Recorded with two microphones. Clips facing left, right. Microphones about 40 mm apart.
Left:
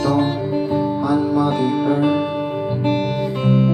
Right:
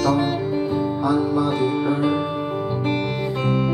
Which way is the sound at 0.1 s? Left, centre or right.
Centre.